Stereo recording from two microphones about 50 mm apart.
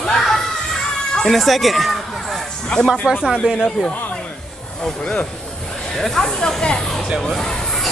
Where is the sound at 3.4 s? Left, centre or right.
Right.